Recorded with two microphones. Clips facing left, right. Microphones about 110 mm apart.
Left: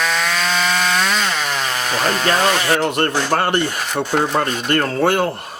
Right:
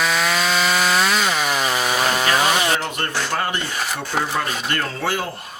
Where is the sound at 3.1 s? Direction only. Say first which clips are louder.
Left 6 dB; 45° left (ahead or behind).